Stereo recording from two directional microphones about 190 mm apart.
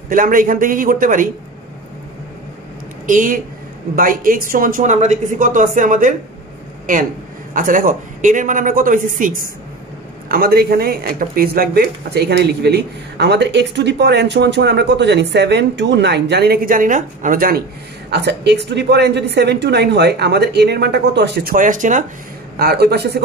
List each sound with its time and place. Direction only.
0.1 s speech: 45° right (ahead or behind)
3.1 s speech: 45° right (ahead or behind)
7.5 s speech: 45° right (ahead or behind)
18.1 s speech: 65° right (ahead or behind); by 22.0 s 40° right (ahead or behind)
22.6 s speech: 55° right (ahead or behind)